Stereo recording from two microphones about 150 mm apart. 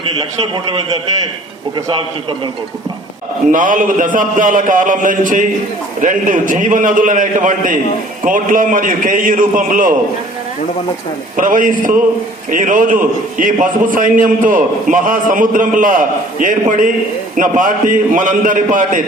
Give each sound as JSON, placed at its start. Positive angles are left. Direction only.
{"t": 0.0, "sound": "a man's voice", "side_deg": -35}
{"t": 3.5, "sound": "a man's voice", "side_deg": -60}
{"t": 11.3, "sound": "a man's voice", "side_deg": -60}